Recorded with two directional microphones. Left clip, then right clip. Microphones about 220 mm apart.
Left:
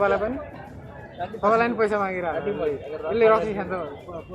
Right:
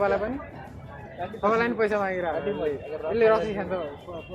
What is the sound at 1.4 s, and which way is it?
Speech, 10° left (ahead or behind).